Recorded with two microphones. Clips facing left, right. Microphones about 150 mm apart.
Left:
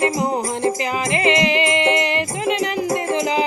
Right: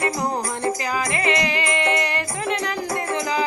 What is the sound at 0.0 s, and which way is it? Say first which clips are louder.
Music: left 4 dB; 25° left (ahead or behind).